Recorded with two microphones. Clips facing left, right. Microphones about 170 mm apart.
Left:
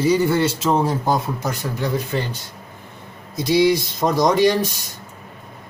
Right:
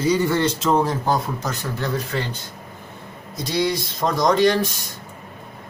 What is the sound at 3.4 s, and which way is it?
Speech, 10° left (ahead or behind).